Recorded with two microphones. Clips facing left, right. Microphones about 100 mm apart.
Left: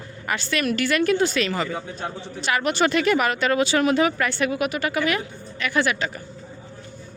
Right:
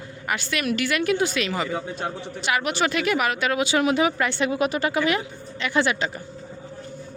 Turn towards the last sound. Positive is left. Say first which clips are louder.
# even
turn(degrees=-25)  # may be behind; listen again after turning